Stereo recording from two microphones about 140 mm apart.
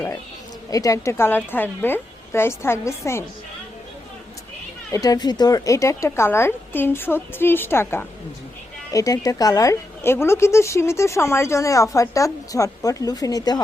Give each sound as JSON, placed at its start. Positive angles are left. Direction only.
{"t": 0.7, "sound": "speech", "side_deg": 25}
{"t": 4.9, "sound": "a woman's voice", "side_deg": 25}